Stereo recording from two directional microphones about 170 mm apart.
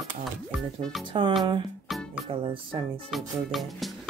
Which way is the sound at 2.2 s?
30° right (ahead or behind).